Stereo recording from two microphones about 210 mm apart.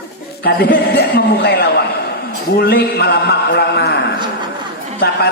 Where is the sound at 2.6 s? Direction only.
50° left (ahead or behind).